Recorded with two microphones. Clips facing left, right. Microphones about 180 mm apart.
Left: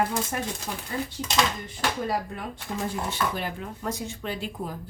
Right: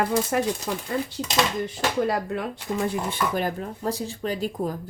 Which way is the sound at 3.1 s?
45° right (ahead or behind).